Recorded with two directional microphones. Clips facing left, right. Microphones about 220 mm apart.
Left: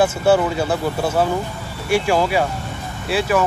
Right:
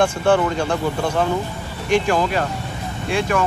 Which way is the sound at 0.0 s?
5° left (ahead or behind).